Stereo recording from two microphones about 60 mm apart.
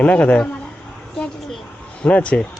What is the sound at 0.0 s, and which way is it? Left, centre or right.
Speech, left.